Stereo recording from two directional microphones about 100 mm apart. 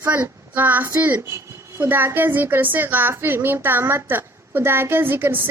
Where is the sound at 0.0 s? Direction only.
20° right (ahead or behind).